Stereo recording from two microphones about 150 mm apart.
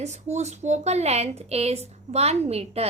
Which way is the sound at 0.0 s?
50° right (ahead or behind).